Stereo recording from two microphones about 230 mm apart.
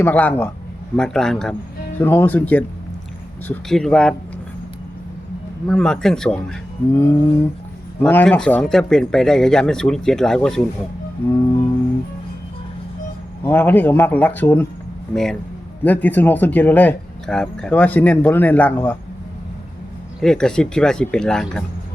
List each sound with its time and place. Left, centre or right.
0.0 s speech: centre
5.6 s speech: centre
13.4 s speech: centre
20.2 s speech: centre